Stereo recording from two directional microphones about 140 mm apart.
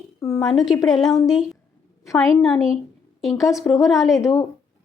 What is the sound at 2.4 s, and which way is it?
A woman's voice, centre (ahead or behind).